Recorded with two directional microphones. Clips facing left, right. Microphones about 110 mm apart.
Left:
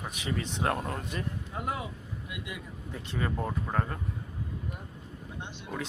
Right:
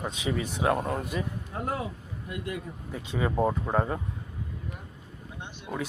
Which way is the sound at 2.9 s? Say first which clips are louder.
Right 4 dB; 10° right (ahead or behind).